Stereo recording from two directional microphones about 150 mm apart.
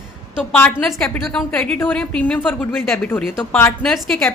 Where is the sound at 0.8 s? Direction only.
Centre (ahead or behind).